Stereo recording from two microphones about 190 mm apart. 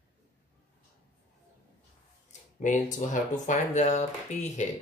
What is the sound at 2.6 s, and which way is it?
Speech, 40° left (ahead or behind).